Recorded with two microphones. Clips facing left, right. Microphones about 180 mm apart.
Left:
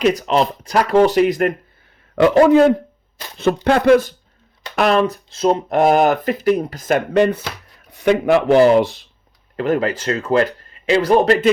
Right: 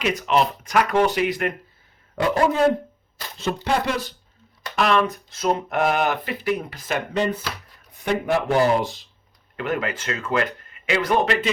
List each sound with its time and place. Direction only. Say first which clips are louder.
0.0 s speech: left 5 dB; 35° left (ahead or behind)
2.1 s speech: left 9 dB; 85° left
3.3 s speech: left 8 dB; 60° left (ahead or behind)
4.8 s speech: left 5 dB; 40° left (ahead or behind); by 7.4 s 65° left (ahead or behind)
7.9 s speech: left 8 dB; 80° left
9.6 s speech: left 7 dB; 35° left (ahead or behind)